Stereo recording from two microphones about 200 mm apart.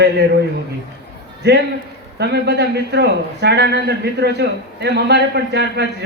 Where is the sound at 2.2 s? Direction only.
55° right (ahead or behind).